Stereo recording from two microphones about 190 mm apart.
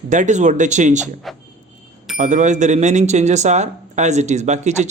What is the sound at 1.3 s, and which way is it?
Speech, centre (ahead or behind).